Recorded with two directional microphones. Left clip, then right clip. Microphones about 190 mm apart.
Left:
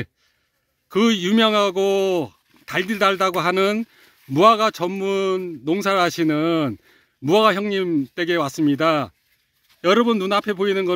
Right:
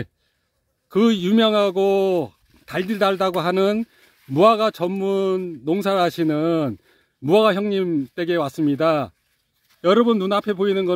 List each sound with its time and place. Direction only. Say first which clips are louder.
0.8 s a man's voice: even; 5° right (ahead or behind)